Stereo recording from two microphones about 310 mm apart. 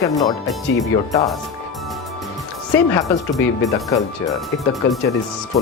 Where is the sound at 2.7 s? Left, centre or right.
Centre.